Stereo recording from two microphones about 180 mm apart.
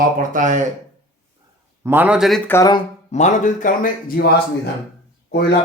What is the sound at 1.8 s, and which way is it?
Speech, 10° right (ahead or behind).